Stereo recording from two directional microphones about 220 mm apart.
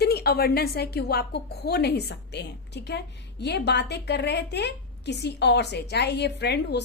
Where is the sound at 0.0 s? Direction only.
45° left (ahead or behind).